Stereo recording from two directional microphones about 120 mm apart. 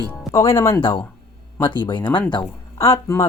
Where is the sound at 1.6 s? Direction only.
40° left (ahead or behind).